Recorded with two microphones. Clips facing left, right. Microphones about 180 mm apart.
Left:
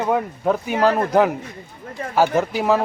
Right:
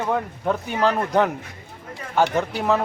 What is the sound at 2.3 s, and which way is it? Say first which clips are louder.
Speech: left 3 dB; 5° left (ahead or behind).